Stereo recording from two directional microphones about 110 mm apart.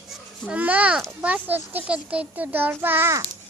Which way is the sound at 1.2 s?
10° right (ahead or behind).